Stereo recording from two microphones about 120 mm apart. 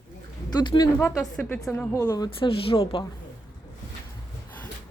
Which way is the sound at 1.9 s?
25° left (ahead or behind).